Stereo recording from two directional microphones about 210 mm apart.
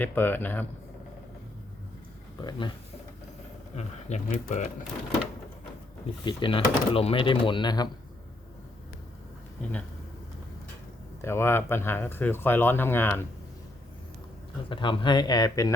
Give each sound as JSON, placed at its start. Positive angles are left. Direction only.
{"t": 0.0, "sound": "speech", "side_deg": 10}
{"t": 2.4, "sound": "speech", "side_deg": 20}
{"t": 3.8, "sound": "speech", "side_deg": 35}
{"t": 6.2, "sound": "speech", "side_deg": 25}
{"t": 9.6, "sound": "speech", "side_deg": 5}
{"t": 11.2, "sound": "speech", "side_deg": 10}
{"t": 14.7, "sound": "speech", "side_deg": 25}